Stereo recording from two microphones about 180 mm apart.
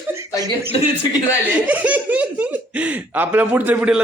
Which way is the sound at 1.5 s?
5° right (ahead or behind).